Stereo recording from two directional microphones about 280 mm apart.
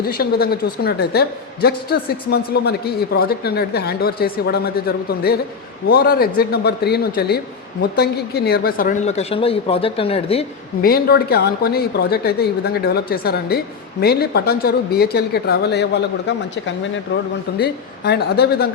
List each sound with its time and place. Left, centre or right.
0.0 s a woman's voice: left
10.8 s a woman's voice: left